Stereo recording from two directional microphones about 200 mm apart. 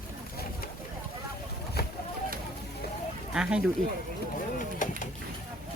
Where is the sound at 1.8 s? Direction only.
50° left (ahead or behind).